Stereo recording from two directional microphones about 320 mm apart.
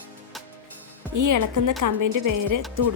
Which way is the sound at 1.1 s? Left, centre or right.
Right.